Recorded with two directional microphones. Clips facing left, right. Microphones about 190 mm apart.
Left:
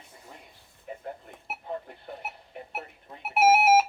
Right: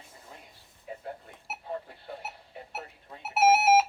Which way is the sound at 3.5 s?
55° left (ahead or behind).